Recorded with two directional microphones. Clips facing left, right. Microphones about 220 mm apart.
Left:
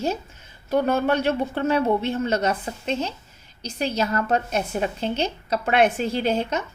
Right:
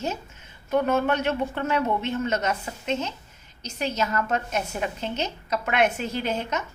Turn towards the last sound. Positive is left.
turn(degrees=30)  # may be behind; listen again after turning